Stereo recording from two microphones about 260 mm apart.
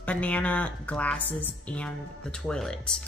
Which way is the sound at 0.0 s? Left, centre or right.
Centre.